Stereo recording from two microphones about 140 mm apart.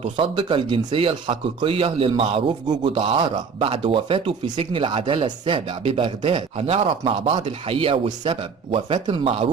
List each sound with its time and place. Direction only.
0.0 s speech: 35° right (ahead or behind)